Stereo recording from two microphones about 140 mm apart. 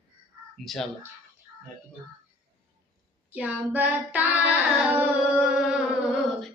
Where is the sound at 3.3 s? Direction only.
10° right (ahead or behind).